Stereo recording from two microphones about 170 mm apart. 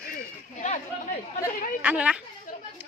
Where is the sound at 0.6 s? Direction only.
45° left (ahead or behind).